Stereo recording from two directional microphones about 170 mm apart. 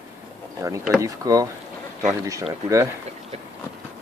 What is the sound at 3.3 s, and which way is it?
Speech, 40° right (ahead or behind).